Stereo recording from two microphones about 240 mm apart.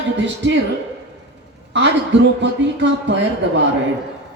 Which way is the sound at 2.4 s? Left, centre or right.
Right.